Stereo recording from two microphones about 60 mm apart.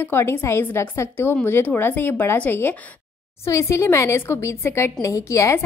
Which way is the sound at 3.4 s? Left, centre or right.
Left.